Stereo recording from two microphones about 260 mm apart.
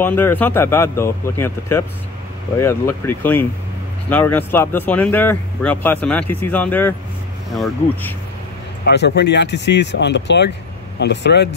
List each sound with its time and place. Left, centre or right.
0.0 s speech: centre
8.8 s speech: left